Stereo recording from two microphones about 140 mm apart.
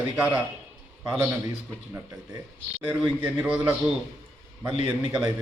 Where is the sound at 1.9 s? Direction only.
25° right (ahead or behind).